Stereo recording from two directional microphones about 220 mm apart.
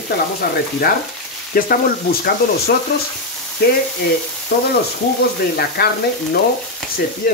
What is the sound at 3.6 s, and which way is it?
Speech, 45° left (ahead or behind).